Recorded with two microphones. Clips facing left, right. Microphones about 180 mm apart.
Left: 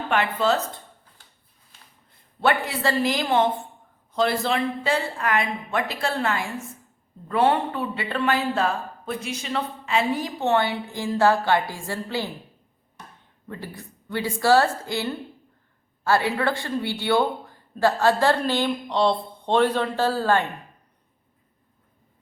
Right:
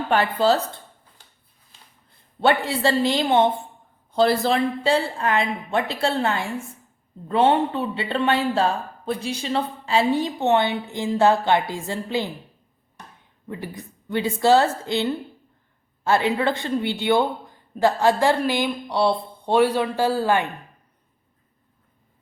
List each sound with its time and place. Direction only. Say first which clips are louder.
0.1 s speech: right 3 dB; 35° right (ahead or behind)
2.4 s a man's voice: right 3 dB; 30° right (ahead or behind)
13.5 s a man's voice: right 3 dB; 15° right (ahead or behind)